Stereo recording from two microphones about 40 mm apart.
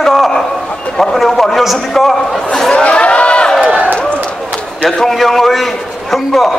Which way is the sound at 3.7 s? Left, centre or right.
Right.